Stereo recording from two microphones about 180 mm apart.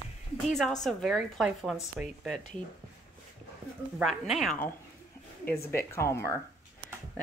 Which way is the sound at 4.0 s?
Centre (ahead or behind).